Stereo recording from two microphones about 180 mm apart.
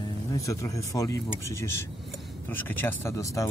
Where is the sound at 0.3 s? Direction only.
15° left (ahead or behind).